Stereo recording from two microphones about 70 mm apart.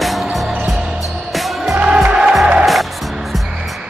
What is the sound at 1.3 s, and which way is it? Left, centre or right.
Music, centre.